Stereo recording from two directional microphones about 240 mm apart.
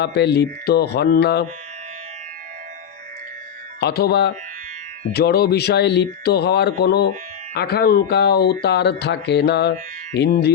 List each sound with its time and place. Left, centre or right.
0.0 s speech: left
3.8 s speech: left